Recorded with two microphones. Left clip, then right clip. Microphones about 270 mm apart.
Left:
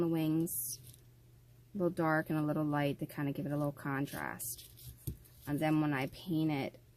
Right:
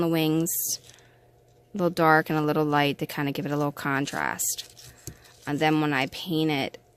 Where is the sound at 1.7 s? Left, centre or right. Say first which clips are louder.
Right 12 dB; right.